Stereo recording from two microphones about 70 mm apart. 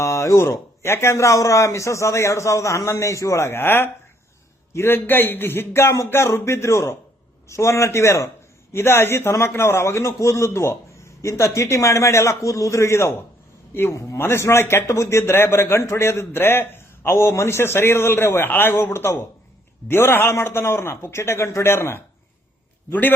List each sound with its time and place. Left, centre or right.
0.0 s a man's voice: left
8.7 s a man's voice: left
22.9 s a man's voice: left